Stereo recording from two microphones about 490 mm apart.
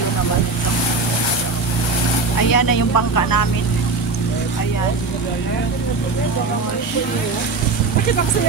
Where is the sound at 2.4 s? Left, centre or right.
Left.